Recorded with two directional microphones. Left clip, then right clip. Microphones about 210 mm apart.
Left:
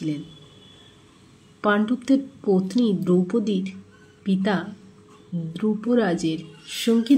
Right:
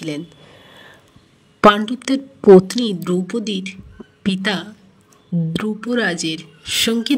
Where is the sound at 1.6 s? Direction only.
50° right (ahead or behind).